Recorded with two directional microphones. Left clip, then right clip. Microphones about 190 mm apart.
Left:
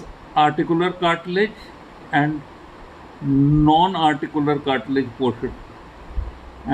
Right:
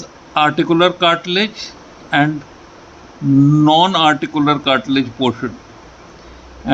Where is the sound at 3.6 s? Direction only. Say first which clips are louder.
Right 4 dB; 45° right (ahead or behind).